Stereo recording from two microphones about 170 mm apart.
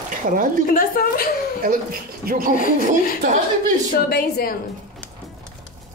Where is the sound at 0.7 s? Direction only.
60° left (ahead or behind).